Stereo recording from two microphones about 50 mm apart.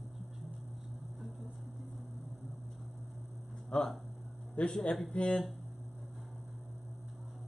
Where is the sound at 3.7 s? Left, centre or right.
Left.